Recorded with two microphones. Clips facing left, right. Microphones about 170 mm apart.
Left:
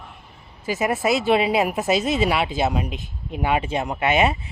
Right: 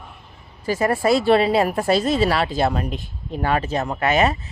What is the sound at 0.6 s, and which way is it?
Speech, 5° left (ahead or behind).